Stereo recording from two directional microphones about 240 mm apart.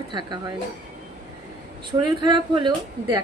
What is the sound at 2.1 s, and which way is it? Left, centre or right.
A woman's voice, centre.